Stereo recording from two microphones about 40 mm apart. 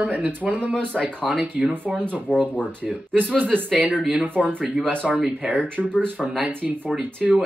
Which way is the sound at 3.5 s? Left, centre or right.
Right.